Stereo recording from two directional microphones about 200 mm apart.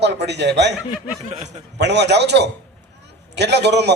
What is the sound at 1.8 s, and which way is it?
A man's voice, 60° right (ahead or behind).